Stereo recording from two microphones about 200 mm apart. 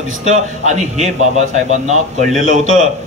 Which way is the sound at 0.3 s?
35° right (ahead or behind).